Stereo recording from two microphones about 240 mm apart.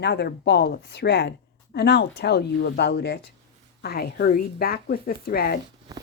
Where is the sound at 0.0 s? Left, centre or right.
Left.